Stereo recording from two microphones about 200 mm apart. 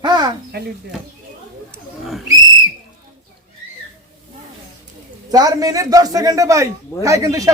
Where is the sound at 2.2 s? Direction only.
20° right (ahead or behind).